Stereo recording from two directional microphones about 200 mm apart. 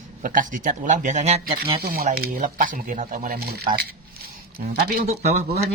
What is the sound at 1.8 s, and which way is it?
Speech, 50° right (ahead or behind).